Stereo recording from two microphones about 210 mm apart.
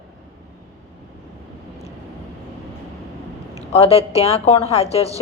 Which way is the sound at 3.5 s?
30° left (ahead or behind).